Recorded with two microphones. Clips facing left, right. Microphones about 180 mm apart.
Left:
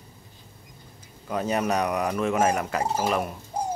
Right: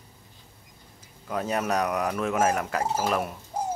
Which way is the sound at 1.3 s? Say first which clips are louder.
Left 2 dB; centre (ahead or behind).